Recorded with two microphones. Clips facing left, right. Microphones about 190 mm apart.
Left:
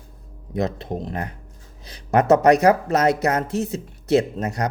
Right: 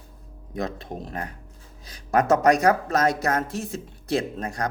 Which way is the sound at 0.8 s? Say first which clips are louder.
Left 5 dB; 20° left (ahead or behind).